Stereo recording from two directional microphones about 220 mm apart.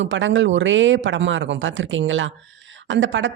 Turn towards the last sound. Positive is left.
turn(degrees=-60)  # may be behind; listen again after turning